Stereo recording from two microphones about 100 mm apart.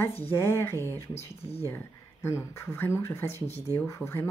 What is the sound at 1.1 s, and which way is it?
Speech, 90° left.